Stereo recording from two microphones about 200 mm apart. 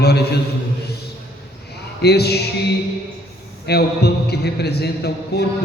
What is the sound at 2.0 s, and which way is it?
Speech, 55° left (ahead or behind).